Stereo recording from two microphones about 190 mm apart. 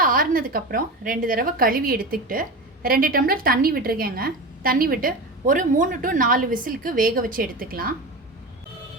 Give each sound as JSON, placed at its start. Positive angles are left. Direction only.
{"t": 0.0, "sound": "a woman's voice", "side_deg": -50}